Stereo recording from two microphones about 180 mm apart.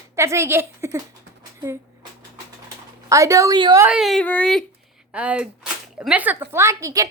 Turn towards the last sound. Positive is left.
turn(degrees=-20)  # may be behind; listen again after turning